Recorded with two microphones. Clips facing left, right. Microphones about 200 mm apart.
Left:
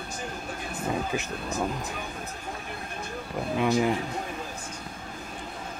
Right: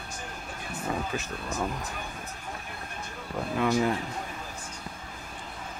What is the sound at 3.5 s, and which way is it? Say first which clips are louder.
Speech: left 1 dB; 15° left (ahead or behind).